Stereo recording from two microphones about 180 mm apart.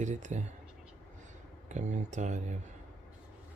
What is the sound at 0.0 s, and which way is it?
Speech, 40° right (ahead or behind).